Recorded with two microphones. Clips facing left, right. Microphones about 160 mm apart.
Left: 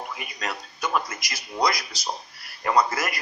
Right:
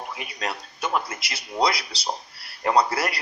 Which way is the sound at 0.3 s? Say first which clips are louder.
Right 2 dB; 30° right (ahead or behind).